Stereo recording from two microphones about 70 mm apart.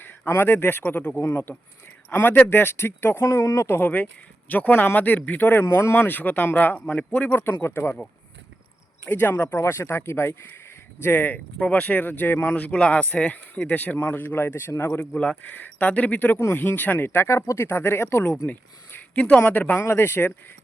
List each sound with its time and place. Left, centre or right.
0.3 s speech: left
5.6 s speech: left; by 7.3 s centre
7.6 s speech: left
9.0 s speech: left
15.1 s speech: centre
15.4 s speech: left
18.4 s a sound: left
19.2 s speech: centre; by 20.3 s left